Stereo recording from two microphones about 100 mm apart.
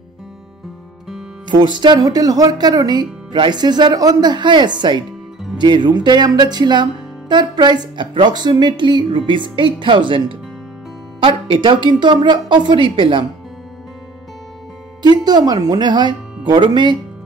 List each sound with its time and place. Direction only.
1.5 s speech: 50° right (ahead or behind)
15.2 s speech: 45° right (ahead or behind)